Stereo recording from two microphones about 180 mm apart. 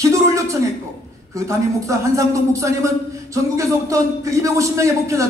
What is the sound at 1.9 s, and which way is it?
A man's voice, 15° right (ahead or behind).